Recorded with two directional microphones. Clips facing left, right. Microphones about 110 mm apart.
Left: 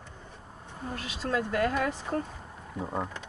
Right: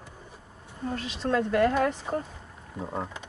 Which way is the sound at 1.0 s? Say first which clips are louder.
Right 3 dB; 5° left (ahead or behind).